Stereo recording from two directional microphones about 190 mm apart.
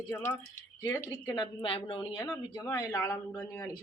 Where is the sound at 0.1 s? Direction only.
10° left (ahead or behind); by 2.0 s 30° left (ahead or behind).